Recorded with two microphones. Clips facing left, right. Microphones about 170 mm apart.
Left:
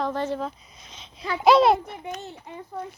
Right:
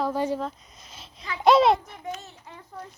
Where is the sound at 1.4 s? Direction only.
Centre (ahead or behind).